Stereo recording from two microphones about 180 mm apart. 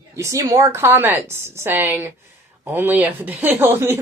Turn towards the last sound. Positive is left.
turn(degrees=-15)  # may be behind; listen again after turning